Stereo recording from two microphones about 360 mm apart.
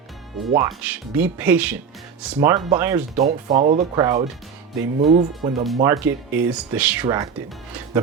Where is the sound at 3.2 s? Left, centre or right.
Centre.